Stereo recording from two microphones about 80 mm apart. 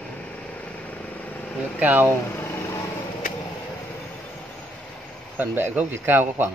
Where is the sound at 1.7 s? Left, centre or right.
Right.